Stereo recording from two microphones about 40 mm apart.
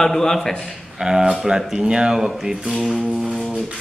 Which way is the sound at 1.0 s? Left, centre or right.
Centre.